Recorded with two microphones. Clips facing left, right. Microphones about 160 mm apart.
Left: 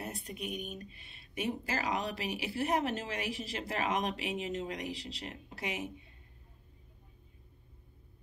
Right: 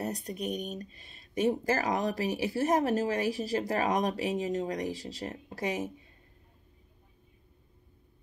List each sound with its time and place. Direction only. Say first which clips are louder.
0.0 s speech: right 7 dB; 40° right (ahead or behind)